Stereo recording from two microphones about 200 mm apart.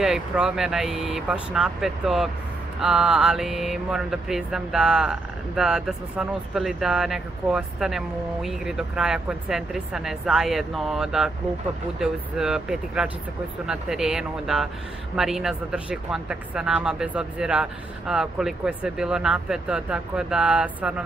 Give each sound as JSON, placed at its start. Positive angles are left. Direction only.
{"t": 0.0, "sound": "speech", "side_deg": 0}